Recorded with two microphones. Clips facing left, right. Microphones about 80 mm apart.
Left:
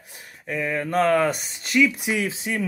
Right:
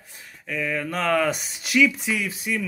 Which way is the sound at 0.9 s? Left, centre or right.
Centre.